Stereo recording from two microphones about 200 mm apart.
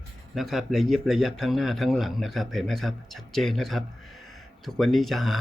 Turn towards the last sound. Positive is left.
turn(degrees=0)  # may be behind; listen again after turning